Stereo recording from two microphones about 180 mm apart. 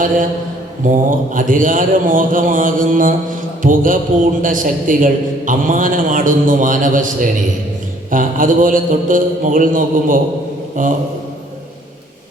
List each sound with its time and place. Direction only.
0.9 s a man's voice: 50° right (ahead or behind)